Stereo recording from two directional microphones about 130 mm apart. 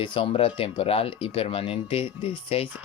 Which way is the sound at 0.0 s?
40° left (ahead or behind).